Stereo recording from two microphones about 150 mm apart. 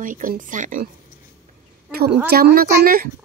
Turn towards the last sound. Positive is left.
turn(degrees=-80)